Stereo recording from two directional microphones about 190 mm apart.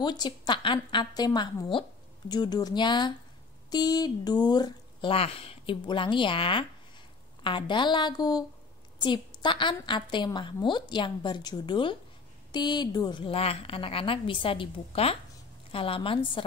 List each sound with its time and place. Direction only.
0.0 s a woman's voice: 20° left (ahead or behind)